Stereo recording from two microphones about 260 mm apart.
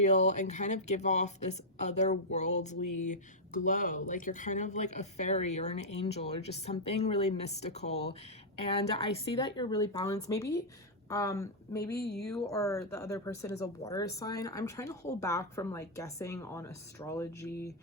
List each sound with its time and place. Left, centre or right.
0.0 s speech: left
9.4 s speech: centre
11.9 s speech: left
12.5 s speech: centre